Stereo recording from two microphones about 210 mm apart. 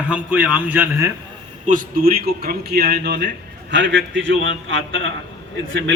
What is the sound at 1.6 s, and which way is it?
A man's voice, 40° right (ahead or behind).